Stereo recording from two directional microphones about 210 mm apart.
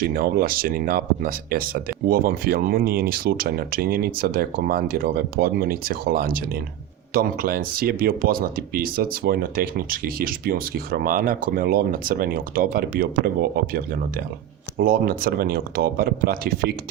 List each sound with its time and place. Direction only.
0.0 s speech: 45° right (ahead or behind)